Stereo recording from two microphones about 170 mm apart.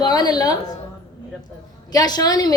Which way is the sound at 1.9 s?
20° left (ahead or behind).